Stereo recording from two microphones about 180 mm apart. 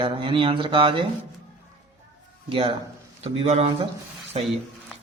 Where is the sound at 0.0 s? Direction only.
30° right (ahead or behind).